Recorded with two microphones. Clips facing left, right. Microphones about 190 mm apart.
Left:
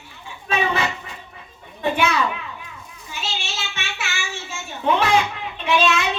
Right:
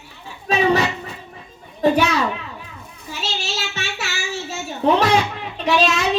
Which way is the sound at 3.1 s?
40° right (ahead or behind).